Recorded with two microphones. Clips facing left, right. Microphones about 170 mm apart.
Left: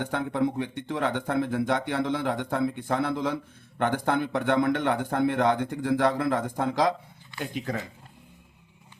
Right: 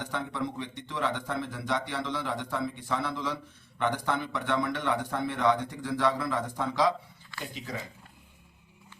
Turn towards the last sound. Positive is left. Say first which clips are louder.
# left 7 dB
turn(degrees=55)  # may be behind; listen again after turning